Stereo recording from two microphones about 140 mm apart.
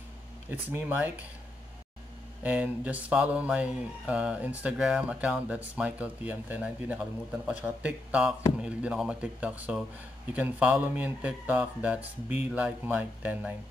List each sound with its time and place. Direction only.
0.5 s speech: 15° right (ahead or behind)
2.4 s speech: 10° right (ahead or behind)